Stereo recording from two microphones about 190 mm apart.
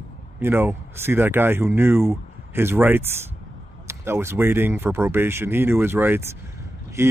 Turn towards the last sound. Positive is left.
turn(degrees=-15)  # may be behind; listen again after turning